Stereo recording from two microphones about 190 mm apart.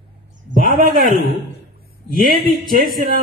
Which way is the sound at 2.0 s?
50° right (ahead or behind).